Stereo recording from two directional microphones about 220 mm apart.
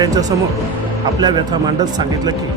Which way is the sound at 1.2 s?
20° right (ahead or behind).